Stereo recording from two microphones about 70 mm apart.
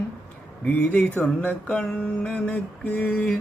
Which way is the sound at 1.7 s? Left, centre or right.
Centre.